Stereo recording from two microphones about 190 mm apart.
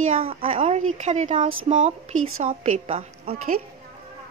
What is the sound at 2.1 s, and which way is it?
Speech, 90° right.